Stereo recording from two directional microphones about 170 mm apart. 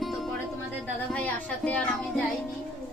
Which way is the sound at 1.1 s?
5° left (ahead or behind).